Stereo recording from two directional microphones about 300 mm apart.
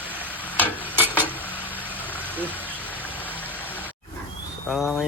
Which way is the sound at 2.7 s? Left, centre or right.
Centre.